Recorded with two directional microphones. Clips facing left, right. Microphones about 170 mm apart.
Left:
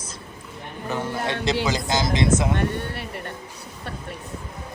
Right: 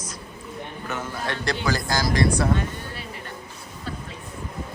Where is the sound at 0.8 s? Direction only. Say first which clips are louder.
Left 5 dB; 30° left (ahead or behind).